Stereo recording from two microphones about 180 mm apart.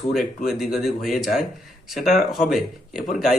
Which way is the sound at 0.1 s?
Centre (ahead or behind).